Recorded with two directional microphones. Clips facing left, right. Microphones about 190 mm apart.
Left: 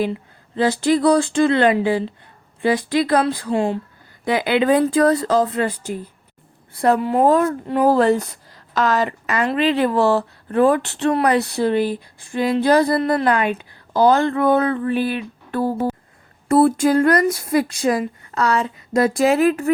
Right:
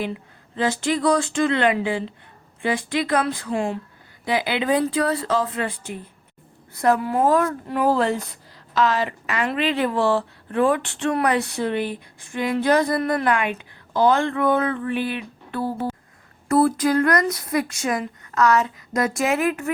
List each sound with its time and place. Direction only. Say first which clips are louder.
0.0 s speech: left 6 dB; 35° left (ahead or behind)
4.3 s speech: left 5 dB; 50° left (ahead or behind)
16.5 s speech: left 4 dB; 25° left (ahead or behind)